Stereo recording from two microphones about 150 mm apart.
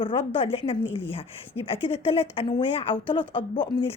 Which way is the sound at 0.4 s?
40° left (ahead or behind).